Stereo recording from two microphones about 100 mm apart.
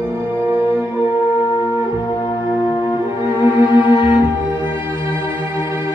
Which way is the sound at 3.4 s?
20° right (ahead or behind).